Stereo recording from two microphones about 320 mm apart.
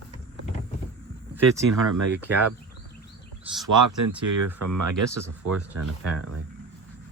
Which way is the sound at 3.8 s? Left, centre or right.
Right.